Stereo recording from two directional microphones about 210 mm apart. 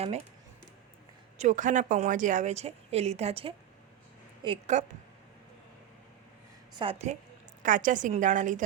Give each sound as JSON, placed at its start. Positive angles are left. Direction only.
{"t": 1.4, "sound": "speech", "side_deg": -35}
{"t": 6.7, "sound": "a woman's voice", "side_deg": -30}